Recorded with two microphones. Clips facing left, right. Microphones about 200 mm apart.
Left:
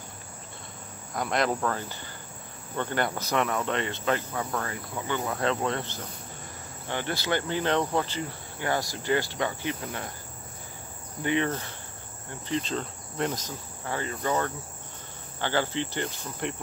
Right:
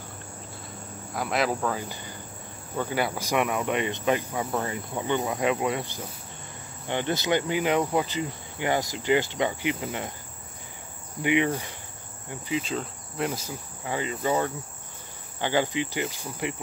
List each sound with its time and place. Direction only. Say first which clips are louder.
1.1 s cricket: even; 5° right (ahead or behind)
2.8 s speech: right 1 dB; 5° right (ahead or behind)
11.2 s speech: right 3 dB; 10° right (ahead or behind)
12.3 s insect: right 1 dB; 10° right (ahead or behind)
15.4 s speech: right 2 dB; 15° right (ahead or behind)